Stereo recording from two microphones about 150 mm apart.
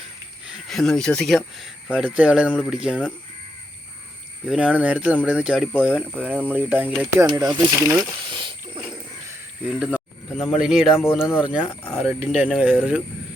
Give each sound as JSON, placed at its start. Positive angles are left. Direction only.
{"t": 0.4, "sound": "speech", "side_deg": 0}
{"t": 4.4, "sound": "speech", "side_deg": -10}
{"t": 7.9, "sound": "speech", "side_deg": -25}
{"t": 9.6, "sound": "speech", "side_deg": -5}
{"t": 10.9, "sound": "speech", "side_deg": 15}
{"t": 11.3, "sound": "speech", "side_deg": -5}